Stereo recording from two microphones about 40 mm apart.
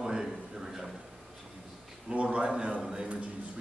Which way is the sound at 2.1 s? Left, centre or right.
Right.